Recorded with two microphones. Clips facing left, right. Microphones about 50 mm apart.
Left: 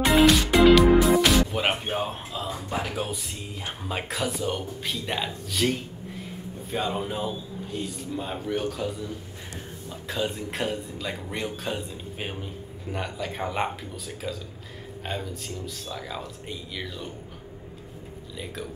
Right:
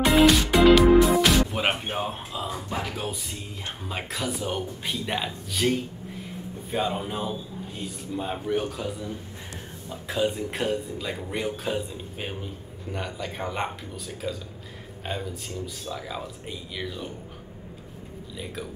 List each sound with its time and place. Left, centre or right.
0.0 s music: centre
3.6 s a man's voice: centre
4.4 s a man's voice: centre
6.7 s a man's voice: centre